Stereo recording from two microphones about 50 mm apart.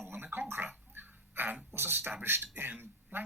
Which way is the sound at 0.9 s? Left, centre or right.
Right.